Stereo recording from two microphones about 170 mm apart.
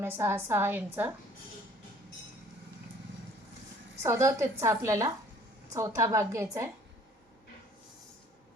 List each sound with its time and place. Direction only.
0.0 s a woman's voice: 15° right (ahead or behind)
4.0 s a woman's voice: 15° right (ahead or behind)